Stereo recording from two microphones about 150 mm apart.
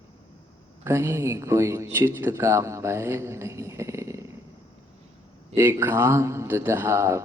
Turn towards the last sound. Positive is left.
turn(degrees=-20)  # may be behind; listen again after turning